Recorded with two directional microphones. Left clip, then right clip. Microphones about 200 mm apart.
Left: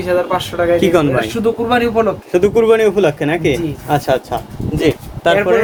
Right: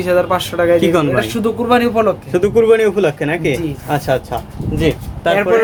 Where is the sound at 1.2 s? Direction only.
50° right (ahead or behind).